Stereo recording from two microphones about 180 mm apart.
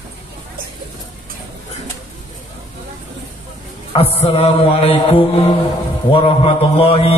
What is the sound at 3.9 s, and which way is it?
Mantra, 30° left (ahead or behind).